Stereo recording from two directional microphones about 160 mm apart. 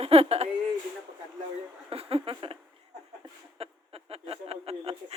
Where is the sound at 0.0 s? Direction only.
40° right (ahead or behind).